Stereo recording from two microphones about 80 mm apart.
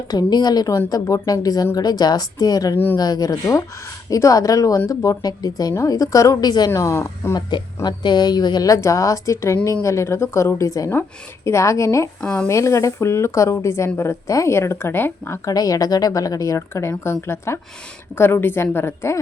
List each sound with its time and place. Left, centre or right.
0.1 s a woman's voice: left
2.7 s a woman's voice: left
3.0 s speech: left
5.7 s speech: left
6.7 s speech: left
7.9 s a woman's voice: left
8.7 s speech: left
12.2 s speech: centre
12.5 s speech: left
15.4 s speech: left
16.6 s a woman's voice: left